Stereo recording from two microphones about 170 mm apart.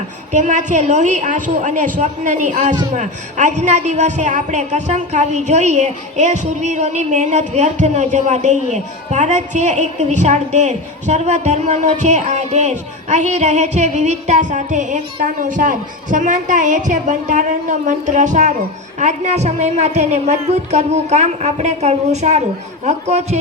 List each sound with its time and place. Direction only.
0.3 s a woman's voice: 45° right (ahead or behind)